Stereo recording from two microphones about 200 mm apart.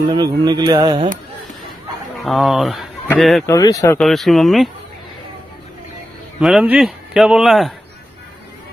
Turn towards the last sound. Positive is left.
turn(degrees=0)  # may be behind; listen again after turning